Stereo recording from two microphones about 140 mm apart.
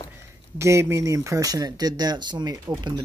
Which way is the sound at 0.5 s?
20° right (ahead or behind).